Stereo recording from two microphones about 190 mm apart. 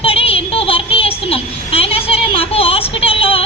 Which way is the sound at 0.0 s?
30° left (ahead or behind).